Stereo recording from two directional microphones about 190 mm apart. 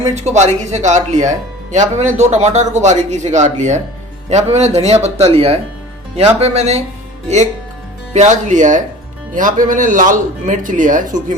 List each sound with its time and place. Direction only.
0.1 s speech: 35° right (ahead or behind)
8.1 s speech: 40° right (ahead or behind)